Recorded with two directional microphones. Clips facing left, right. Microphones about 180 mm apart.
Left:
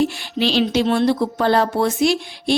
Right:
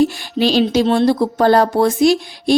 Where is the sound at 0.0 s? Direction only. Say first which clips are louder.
Right 4 dB; 40° right (ahead or behind).